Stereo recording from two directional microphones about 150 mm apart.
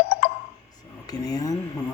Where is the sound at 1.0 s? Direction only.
25° left (ahead or behind).